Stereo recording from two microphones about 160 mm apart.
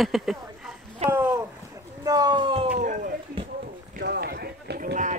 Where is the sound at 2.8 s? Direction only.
50° right (ahead or behind).